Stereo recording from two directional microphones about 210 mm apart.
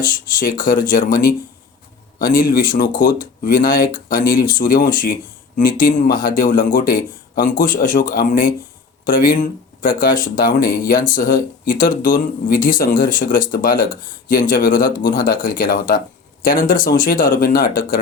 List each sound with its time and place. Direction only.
0.0 s speech: 40° left (ahead or behind)